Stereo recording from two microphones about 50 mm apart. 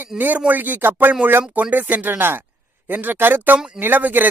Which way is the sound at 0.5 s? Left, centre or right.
Right.